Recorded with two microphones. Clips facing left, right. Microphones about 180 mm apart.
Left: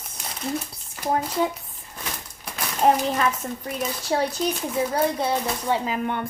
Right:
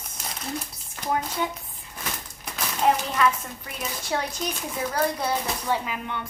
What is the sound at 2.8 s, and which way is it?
Speech, 40° left (ahead or behind).